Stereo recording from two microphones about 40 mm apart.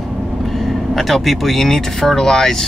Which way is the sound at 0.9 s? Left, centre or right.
Centre.